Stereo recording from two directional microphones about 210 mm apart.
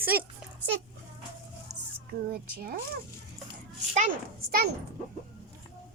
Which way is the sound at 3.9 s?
40° right (ahead or behind).